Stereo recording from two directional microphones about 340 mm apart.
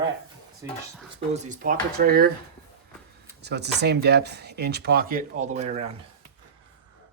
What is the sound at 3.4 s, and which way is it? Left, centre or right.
Speech, right.